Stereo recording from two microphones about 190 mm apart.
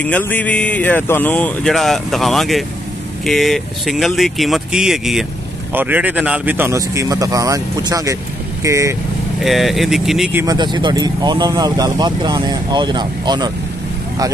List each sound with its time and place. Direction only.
0.0 s speech: 10° left (ahead or behind); by 8.9 s 15° right (ahead or behind)
9.4 s speech: centre (ahead or behind)
10.4 s speech: 20° right (ahead or behind)